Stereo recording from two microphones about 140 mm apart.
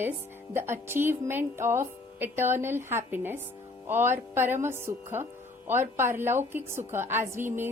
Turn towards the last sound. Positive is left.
turn(degrees=-15)  # may be behind; listen again after turning